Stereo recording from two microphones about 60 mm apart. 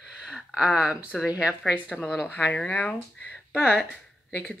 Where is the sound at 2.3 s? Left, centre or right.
Left.